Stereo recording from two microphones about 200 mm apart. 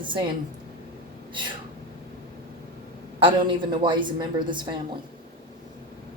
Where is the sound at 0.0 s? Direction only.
25° right (ahead or behind).